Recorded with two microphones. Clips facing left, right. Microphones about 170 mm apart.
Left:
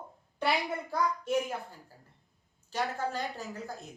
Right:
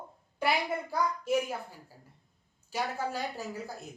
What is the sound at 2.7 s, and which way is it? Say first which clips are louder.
Speech: even; 10° right (ahead or behind).